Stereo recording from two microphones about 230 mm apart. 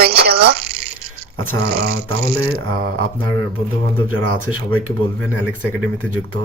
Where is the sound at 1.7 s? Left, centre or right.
Right.